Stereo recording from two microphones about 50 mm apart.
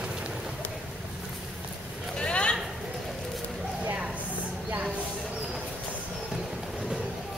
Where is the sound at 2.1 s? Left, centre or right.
Left.